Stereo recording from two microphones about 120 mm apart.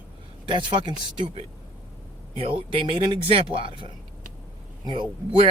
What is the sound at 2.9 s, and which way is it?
Speech, 45° right (ahead or behind).